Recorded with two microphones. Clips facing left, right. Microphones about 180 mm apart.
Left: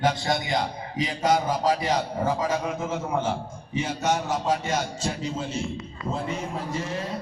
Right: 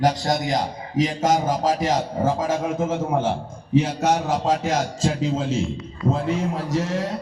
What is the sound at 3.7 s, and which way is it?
A man's voice, 65° right (ahead or behind).